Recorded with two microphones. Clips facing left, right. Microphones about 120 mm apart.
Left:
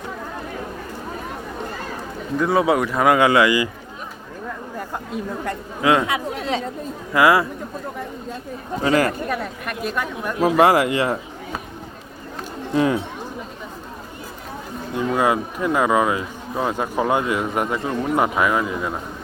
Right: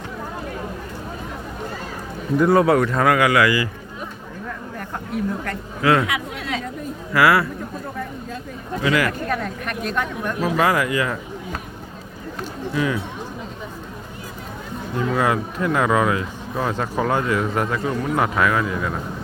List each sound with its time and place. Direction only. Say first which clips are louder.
2.6 s speech: right 1 dB; 10° left (ahead or behind)
3.1 s a woman's voice: left 3 dB; 25° left (ahead or behind)
5.1 s a woman's voice: right 2 dB; 20° left (ahead or behind)
6.1 s speech: left 3 dB; 30° left (ahead or behind)
7.1 s a woman's voice: left 1 dB; 20° left (ahead or behind)
8.8 s speech: left 2 dB; 35° left (ahead or behind)
9.3 s speech: right 1 dB; 5° left (ahead or behind)
10.6 s speech: left 4 dB; 30° left (ahead or behind)
12.7 s speech: left 4 dB; 40° left (ahead or behind)
14.9 s speech: left 1 dB; 10° left (ahead or behind)